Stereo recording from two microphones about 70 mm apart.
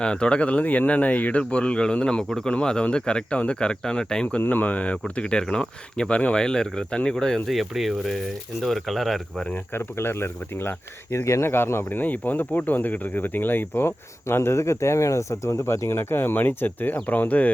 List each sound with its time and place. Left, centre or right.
0.0 s speech: centre
9.7 s speech: left